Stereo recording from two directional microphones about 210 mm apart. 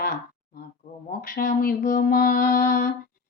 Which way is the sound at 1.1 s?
45° left (ahead or behind).